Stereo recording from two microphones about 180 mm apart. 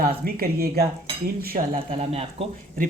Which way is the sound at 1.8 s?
30° right (ahead or behind).